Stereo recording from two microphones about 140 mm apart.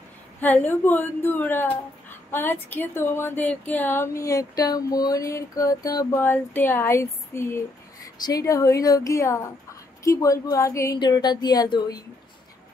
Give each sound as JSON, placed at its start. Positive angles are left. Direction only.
{"t": 0.4, "sound": "speech", "side_deg": 10}